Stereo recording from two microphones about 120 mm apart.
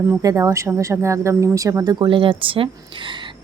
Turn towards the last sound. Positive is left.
turn(degrees=-45)  # may be behind; listen again after turning